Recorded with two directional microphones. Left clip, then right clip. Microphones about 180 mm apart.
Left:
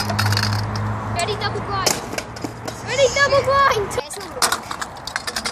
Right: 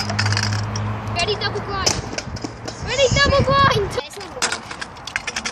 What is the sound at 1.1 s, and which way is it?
Speech, 50° right (ahead or behind).